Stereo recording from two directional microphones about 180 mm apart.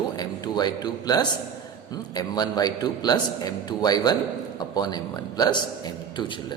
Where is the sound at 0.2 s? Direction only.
20° left (ahead or behind).